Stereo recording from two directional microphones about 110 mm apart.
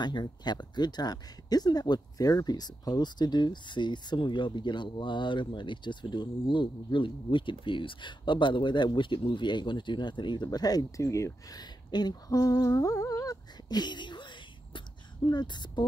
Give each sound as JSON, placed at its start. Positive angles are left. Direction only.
{"t": 0.0, "sound": "speech", "side_deg": 40}
{"t": 11.9, "sound": "humming", "side_deg": 40}
{"t": 15.2, "sound": "speech", "side_deg": 40}